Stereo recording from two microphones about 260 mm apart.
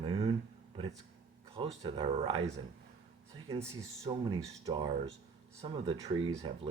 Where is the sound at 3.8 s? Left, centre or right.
Centre.